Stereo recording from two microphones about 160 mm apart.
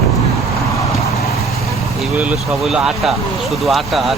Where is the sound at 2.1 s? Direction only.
5° right (ahead or behind).